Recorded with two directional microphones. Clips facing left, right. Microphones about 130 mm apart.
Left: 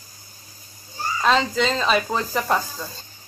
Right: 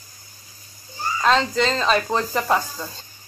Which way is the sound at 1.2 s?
5° left (ahead or behind).